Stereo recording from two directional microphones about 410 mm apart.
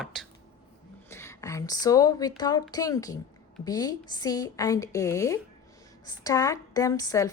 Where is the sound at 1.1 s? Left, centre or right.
Centre.